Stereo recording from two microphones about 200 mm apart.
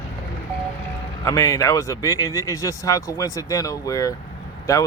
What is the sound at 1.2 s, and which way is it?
Speech, 15° left (ahead or behind).